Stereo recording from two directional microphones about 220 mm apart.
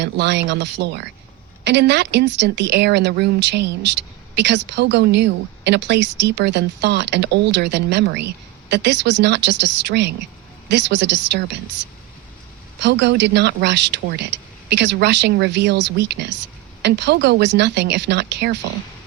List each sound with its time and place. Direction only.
0.0 s a woman's voice: 50° right (ahead or behind)
12.8 s a woman's voice: 50° right (ahead or behind)